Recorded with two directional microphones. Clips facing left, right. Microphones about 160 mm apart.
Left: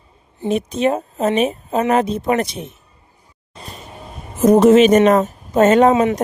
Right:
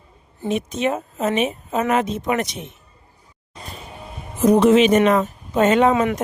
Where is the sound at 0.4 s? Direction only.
35° left (ahead or behind).